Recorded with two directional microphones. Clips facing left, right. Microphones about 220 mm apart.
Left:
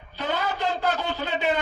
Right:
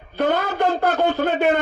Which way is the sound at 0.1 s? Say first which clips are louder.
Right 7 dB; 55° right (ahead or behind).